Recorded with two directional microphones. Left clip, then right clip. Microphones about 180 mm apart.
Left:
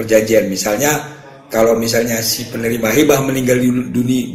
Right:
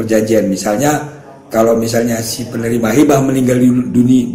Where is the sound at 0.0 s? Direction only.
40° left (ahead or behind).